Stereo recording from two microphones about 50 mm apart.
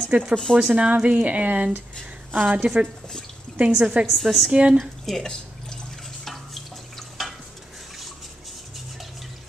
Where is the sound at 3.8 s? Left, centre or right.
Right.